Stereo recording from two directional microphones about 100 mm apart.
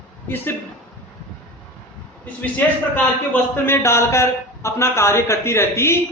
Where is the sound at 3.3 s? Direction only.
25° left (ahead or behind).